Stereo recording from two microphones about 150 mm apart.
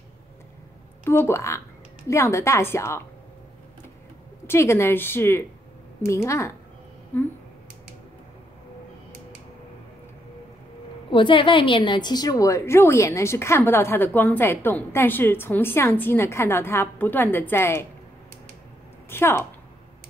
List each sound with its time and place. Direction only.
1.0 s a woman's voice: 15° left (ahead or behind)
4.5 s a woman's voice: 15° left (ahead or behind)
11.1 s a woman's voice: 35° left (ahead or behind); by 17.8 s 15° left (ahead or behind)
19.0 s a sound: 15° left (ahead or behind)